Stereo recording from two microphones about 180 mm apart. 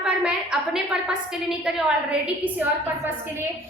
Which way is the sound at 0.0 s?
5° right (ahead or behind).